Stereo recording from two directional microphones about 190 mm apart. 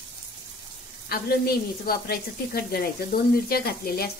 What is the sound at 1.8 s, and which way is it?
Speech, 55° left (ahead or behind).